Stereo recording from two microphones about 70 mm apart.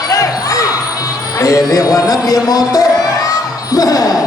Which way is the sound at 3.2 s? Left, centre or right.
Left.